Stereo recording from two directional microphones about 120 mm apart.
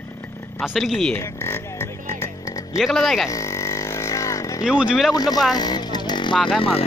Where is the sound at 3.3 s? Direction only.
25° left (ahead or behind).